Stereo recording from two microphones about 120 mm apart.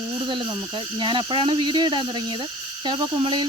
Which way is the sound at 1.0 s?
40° right (ahead or behind).